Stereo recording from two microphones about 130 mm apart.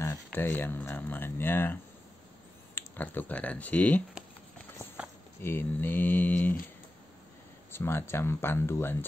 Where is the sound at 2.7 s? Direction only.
15° left (ahead or behind).